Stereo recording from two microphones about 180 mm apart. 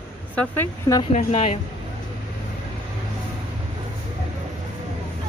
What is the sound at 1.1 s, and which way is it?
Speech, 40° left (ahead or behind).